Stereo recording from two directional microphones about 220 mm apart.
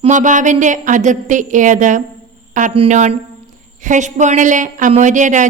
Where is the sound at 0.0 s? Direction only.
35° right (ahead or behind).